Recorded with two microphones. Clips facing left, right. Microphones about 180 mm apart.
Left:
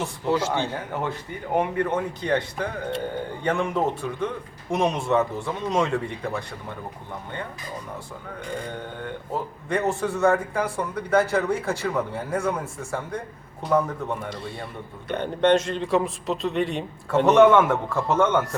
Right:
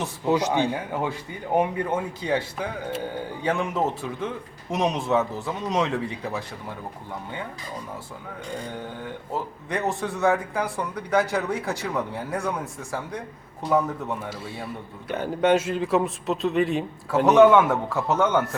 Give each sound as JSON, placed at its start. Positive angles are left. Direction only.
{"t": 0.0, "sound": "a man's voice", "side_deg": -15}
{"t": 9.6, "sound": "a man's voice", "side_deg": 0}